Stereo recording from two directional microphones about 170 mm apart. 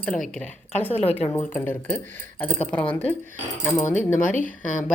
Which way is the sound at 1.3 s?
10° left (ahead or behind).